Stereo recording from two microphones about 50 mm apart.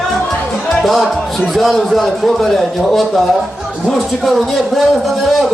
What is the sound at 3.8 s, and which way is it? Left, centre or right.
A man's voice, centre.